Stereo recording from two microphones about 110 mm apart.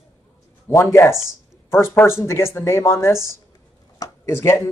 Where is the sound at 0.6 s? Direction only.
25° left (ahead or behind).